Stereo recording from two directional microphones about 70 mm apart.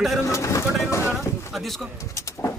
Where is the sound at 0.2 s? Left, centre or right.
Left.